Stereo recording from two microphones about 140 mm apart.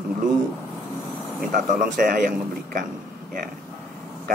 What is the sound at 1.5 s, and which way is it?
Speech, 80° right.